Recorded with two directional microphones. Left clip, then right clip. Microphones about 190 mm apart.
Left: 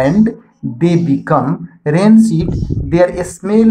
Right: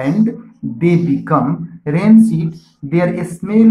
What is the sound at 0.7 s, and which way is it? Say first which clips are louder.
Speech: left 1 dB; 40° left (ahead or behind).